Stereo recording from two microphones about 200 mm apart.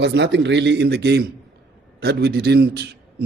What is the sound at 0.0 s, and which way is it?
A man's voice, 60° right (ahead or behind).